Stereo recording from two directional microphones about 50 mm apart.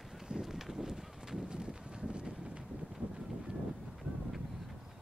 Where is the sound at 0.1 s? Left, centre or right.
Centre.